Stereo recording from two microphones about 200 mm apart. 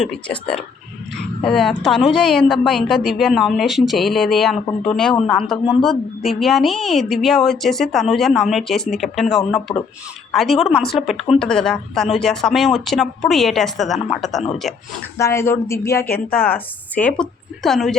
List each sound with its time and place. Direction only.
0.0 s a woman's voice: 5° left (ahead or behind)
15.2 s speech: 15° left (ahead or behind)
16.0 s speech: 50° left (ahead or behind)
16.9 s a woman's voice: 5° left (ahead or behind)